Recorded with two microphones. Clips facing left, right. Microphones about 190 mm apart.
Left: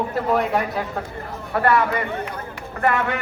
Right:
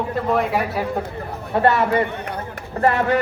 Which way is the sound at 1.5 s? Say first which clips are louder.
Right 3 dB; 25° right (ahead or behind).